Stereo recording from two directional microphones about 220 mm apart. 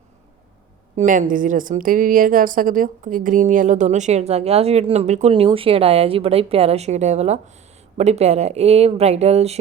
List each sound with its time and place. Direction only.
0.9 s a woman's voice: 35° right (ahead or behind)